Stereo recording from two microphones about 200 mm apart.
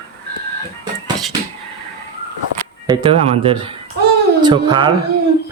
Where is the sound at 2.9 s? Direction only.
25° right (ahead or behind).